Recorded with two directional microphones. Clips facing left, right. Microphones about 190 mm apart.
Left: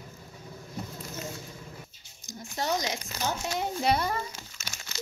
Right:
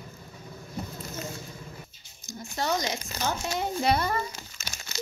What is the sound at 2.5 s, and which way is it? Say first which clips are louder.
Speech: right 1 dB; 15° left (ahead or behind).